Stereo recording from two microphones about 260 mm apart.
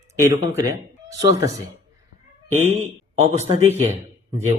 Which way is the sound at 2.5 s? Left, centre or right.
Right.